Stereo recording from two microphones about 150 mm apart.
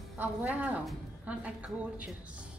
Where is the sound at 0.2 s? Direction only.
10° right (ahead or behind).